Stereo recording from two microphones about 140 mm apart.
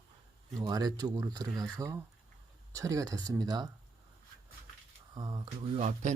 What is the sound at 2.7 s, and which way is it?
Speech, 25° right (ahead or behind).